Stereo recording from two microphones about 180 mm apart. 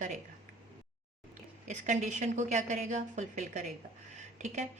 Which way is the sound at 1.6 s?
40° right (ahead or behind).